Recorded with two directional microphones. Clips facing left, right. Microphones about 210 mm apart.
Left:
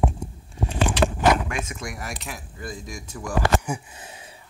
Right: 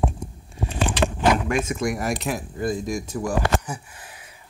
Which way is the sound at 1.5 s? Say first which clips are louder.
Right 8 dB; 45° right (ahead or behind).